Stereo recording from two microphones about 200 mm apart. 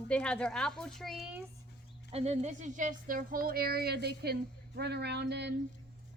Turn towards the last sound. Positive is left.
turn(degrees=-55)  # may be behind; listen again after turning